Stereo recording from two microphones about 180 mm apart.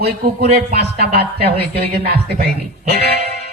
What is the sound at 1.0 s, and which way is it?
A man's voice, 65° right (ahead or behind).